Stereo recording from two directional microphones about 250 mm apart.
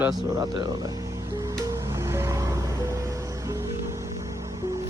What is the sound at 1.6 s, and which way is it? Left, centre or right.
Music, centre.